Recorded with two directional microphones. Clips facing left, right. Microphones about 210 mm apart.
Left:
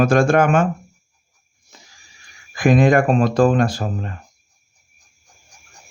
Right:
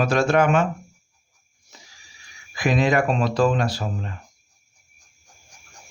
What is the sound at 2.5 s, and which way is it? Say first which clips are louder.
Speech: left 6 dB; 50° left (ahead or behind).